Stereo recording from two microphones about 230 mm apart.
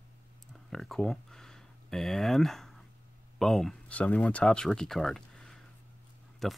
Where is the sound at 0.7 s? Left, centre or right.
Centre.